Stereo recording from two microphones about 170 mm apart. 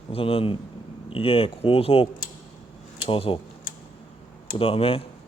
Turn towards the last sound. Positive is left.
turn(degrees=35)  # may be behind; listen again after turning